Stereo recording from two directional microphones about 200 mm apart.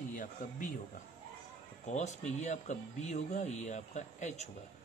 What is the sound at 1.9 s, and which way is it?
Speech, 35° left (ahead or behind).